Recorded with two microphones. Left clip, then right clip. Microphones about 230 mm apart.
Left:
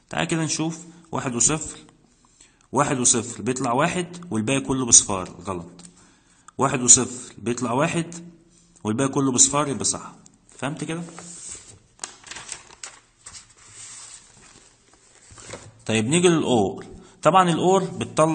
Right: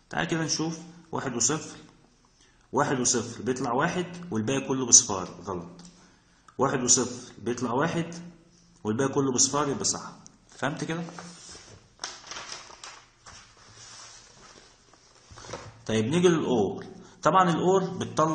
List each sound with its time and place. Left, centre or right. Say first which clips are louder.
0.1 s a man's voice: left 3 dB; left
3.1 s a man's voice: left 4 dB; left
10.6 s speech: left 1 dB; left
15.8 s a man's voice: left 4 dB; left